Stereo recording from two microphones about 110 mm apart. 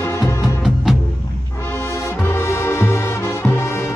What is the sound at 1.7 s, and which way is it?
Music, 20° left (ahead or behind).